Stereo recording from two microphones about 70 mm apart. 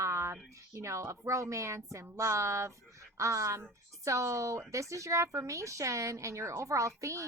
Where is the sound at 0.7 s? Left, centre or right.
Right.